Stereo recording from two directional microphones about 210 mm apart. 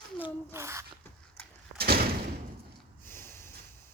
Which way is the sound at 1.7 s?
45° right (ahead or behind).